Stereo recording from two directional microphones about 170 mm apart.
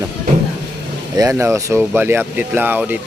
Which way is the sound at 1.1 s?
15° right (ahead or behind).